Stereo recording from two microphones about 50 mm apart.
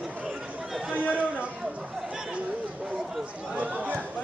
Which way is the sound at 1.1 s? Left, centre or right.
Right.